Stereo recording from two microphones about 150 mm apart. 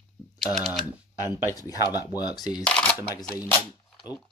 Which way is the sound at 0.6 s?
Centre (ahead or behind).